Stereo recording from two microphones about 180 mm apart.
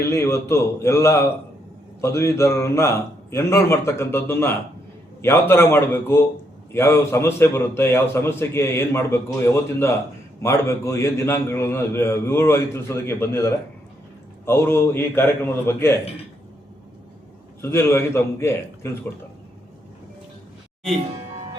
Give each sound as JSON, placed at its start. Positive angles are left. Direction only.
{"t": 0.0, "sound": "a man's voice", "side_deg": 15}
{"t": 17.6, "sound": "a man's voice", "side_deg": 15}